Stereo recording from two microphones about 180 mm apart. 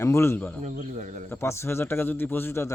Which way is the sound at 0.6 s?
45° right (ahead or behind).